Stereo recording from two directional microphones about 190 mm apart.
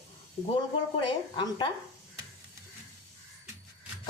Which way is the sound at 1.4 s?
25° left (ahead or behind).